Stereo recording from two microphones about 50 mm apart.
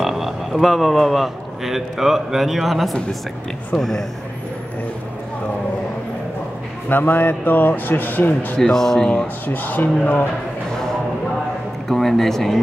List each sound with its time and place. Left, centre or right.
0.0 s a man's voice: centre
6.9 s a man's voice: left
8.5 s speech: centre
9.5 s a man's voice: left
11.9 s speech: centre